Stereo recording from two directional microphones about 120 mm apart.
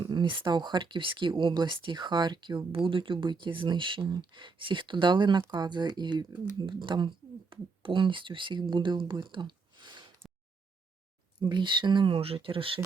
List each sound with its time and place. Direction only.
0.0 s speech: 40° right (ahead or behind)
9.3 s a sound: 40° right (ahead or behind)
11.3 s speech: 40° right (ahead or behind)